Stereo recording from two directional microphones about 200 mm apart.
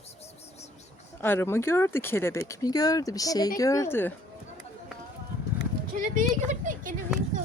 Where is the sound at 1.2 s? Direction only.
10° left (ahead or behind).